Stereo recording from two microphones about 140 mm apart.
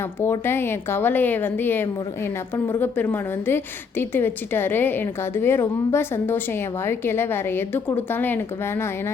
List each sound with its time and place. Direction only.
0.2 s a woman's voice: 15° left (ahead or behind)